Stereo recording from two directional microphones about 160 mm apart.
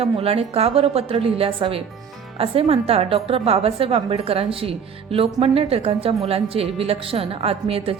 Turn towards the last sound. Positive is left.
turn(degrees=-35)  # may be behind; listen again after turning